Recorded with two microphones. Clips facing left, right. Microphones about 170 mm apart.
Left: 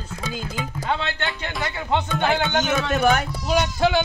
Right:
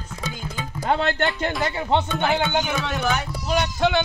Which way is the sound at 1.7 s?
20° right (ahead or behind).